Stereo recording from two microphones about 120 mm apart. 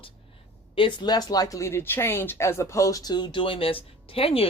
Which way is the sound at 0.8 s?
40° left (ahead or behind).